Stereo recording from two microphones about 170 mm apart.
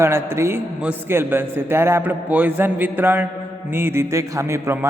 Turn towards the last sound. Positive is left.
turn(degrees=-15)  # may be behind; listen again after turning